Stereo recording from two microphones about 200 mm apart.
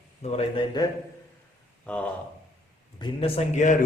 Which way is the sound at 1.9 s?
5° left (ahead or behind).